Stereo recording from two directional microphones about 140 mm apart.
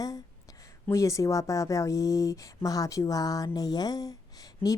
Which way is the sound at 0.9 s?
20° left (ahead or behind).